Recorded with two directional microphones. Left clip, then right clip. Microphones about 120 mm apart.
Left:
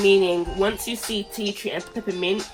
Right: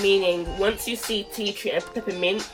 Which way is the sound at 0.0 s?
40° left (ahead or behind).